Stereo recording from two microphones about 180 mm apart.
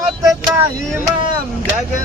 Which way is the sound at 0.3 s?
10° right (ahead or behind).